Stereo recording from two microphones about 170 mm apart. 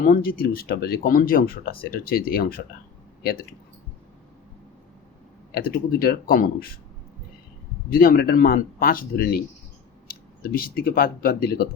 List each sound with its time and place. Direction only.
0.0 s speech: 60° left (ahead or behind)
5.5 s speech: 65° left (ahead or behind)
7.9 s speech: 60° left (ahead or behind)